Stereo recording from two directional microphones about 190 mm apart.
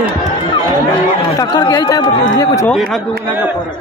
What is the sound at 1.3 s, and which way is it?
Speech, 20° left (ahead or behind).